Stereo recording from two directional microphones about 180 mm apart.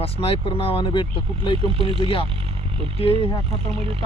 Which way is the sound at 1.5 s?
30° right (ahead or behind).